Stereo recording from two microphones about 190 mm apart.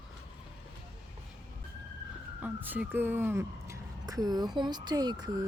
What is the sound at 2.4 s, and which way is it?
Speech, 10° right (ahead or behind).